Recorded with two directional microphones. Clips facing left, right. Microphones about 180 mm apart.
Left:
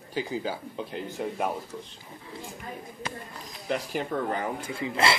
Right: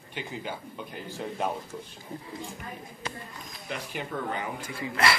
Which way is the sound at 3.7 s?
40° left (ahead or behind).